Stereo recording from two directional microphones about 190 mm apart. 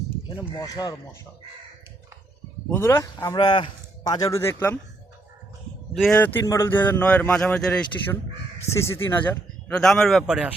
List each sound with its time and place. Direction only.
0.6 s speech: 20° left (ahead or behind)
2.6 s a man's voice: 10° left (ahead or behind)
5.9 s a man's voice: 5° left (ahead or behind)